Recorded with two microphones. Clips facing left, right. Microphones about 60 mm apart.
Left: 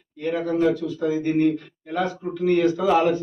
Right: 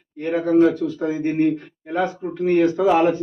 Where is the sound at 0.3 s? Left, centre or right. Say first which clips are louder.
Right 5 dB; right.